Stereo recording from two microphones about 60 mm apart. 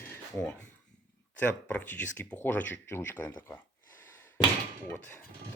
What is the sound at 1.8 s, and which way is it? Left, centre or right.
Speech, left.